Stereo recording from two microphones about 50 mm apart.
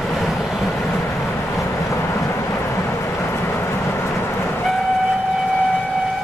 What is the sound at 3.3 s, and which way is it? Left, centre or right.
Train, left.